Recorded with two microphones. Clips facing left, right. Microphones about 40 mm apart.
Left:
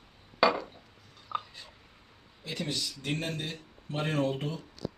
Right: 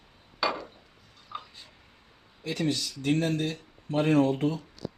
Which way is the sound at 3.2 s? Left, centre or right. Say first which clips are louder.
Right 7 dB; right.